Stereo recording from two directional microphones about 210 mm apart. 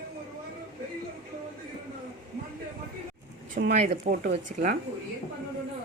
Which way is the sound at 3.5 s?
40° right (ahead or behind).